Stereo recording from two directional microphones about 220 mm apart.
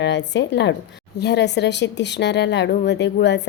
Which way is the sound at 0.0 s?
50° left (ahead or behind).